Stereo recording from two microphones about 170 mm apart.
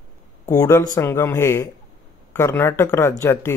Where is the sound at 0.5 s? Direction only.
15° left (ahead or behind).